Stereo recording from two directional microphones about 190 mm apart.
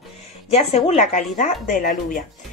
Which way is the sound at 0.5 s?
35° left (ahead or behind).